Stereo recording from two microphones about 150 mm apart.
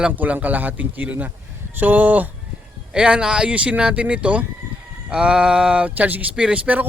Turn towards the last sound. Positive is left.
turn(degrees=-10)  # may be behind; listen again after turning